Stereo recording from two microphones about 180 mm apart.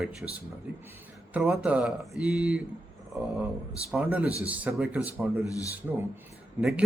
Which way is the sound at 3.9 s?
5° right (ahead or behind).